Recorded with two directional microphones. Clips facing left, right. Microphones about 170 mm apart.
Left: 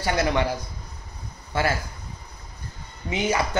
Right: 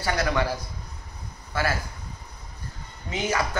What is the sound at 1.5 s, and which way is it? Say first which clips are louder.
Speech: left 3 dB; 25° left (ahead or behind).